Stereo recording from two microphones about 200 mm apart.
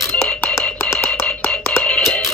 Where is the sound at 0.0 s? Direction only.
5° left (ahead or behind).